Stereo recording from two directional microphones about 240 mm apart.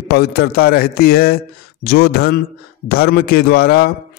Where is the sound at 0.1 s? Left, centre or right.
Left.